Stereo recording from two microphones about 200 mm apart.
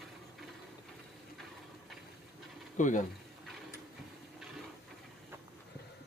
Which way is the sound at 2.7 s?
40° left (ahead or behind).